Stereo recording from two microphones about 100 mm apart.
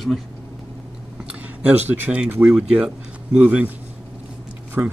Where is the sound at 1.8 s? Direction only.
20° right (ahead or behind).